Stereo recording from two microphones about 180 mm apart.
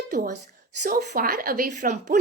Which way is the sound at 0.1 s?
45° right (ahead or behind).